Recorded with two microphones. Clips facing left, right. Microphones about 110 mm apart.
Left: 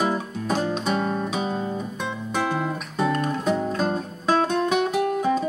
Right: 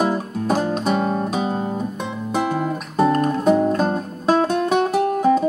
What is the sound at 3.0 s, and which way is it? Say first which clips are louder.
Music: right 6 dB; 45° right (ahead or behind).